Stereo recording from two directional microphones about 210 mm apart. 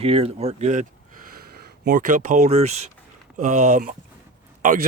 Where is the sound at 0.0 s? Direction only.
30° right (ahead or behind).